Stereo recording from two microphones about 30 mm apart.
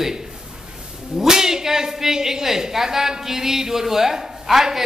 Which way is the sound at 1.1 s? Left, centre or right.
Centre.